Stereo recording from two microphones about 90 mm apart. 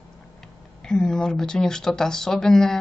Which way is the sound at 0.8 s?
10° left (ahead or behind).